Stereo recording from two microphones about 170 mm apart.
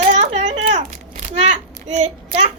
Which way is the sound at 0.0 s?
45° right (ahead or behind).